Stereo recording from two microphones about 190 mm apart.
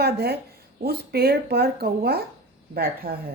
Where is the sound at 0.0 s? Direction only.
55° right (ahead or behind).